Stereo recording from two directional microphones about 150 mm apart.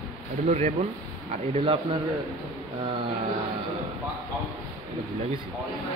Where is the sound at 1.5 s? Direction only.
35° right (ahead or behind).